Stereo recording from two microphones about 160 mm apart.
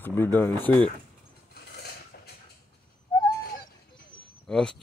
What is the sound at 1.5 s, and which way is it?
Dishes, 80° left.